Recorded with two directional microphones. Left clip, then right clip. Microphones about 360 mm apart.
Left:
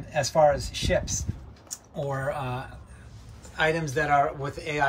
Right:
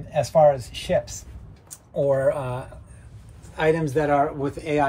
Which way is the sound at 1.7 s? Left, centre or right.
Centre.